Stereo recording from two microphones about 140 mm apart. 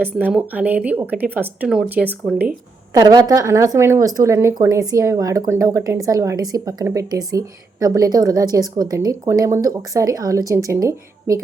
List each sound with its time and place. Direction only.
0.0 s speech: 10° right (ahead or behind)
2.9 s speech: 30° right (ahead or behind)